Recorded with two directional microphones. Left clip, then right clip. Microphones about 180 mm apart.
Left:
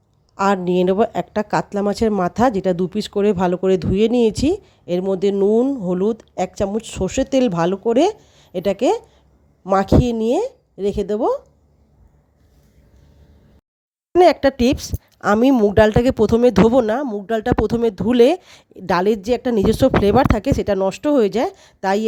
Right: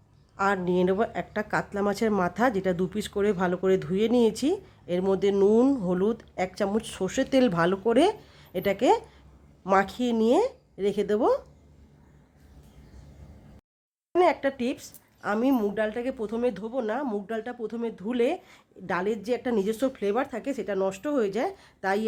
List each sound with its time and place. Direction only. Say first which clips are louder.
0.3 s speech: left 8 dB; 35° left (ahead or behind)
5.5 s speech: left 5 dB; 15° left (ahead or behind)
5.9 s speech: left 7 dB; 25° left (ahead or behind)
14.2 s speech: left 10 dB; 50° left (ahead or behind)
16.8 s speech: left 9 dB; 50° left (ahead or behind)